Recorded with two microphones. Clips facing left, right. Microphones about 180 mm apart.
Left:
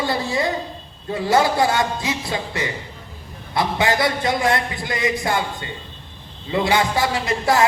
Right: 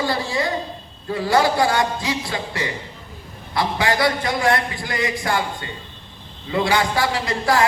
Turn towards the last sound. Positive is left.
turn(degrees=20)  # may be behind; listen again after turning